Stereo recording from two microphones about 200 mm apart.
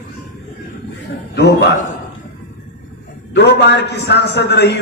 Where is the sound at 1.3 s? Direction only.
55° left (ahead or behind).